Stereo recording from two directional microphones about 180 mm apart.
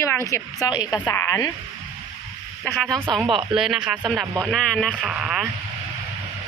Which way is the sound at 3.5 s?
5° right (ahead or behind).